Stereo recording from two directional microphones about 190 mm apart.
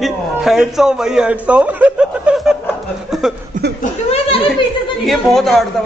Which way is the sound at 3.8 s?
30° left (ahead or behind).